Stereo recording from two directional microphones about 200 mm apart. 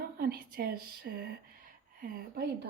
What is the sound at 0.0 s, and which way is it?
Speech, 50° right (ahead or behind).